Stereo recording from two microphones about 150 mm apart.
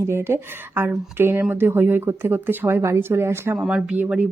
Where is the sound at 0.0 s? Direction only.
15° right (ahead or behind).